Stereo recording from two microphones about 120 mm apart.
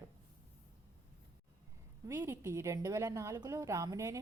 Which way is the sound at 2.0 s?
30° right (ahead or behind).